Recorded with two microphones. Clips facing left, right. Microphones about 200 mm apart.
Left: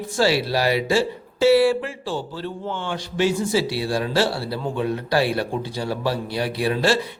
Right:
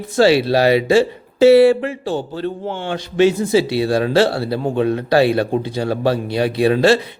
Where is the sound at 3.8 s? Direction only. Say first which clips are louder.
Right 7 dB; 60° right (ahead or behind).